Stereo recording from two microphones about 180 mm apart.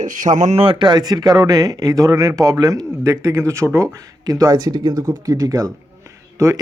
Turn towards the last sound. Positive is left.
turn(degrees=-20)  # may be behind; listen again after turning